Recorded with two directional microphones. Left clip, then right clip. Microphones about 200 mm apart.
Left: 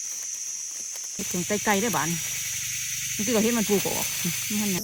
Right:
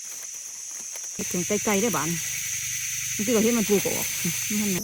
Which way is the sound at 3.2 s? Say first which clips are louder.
Right 2 dB; 30° left (ahead or behind).